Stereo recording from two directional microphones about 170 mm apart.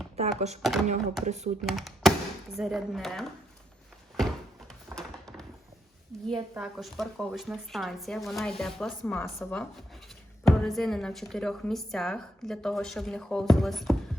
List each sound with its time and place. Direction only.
0.2 s speech: 40° right (ahead or behind)
0.6 s a woman's voice: centre (ahead or behind)
1.2 s speech: 40° right (ahead or behind)
1.6 s speech: centre (ahead or behind)
4.7 s a sound: 5° left (ahead or behind)
6.6 s a woman's voice: centre (ahead or behind)